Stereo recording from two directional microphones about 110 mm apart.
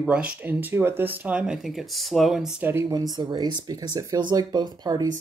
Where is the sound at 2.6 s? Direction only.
25° right (ahead or behind).